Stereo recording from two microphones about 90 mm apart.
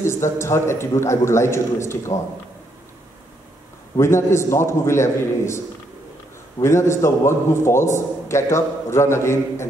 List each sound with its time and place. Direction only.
0.0 s a man's voice: 30° left (ahead or behind)
4.0 s a man's voice: 30° left (ahead or behind)
6.6 s a man's voice: 30° left (ahead or behind)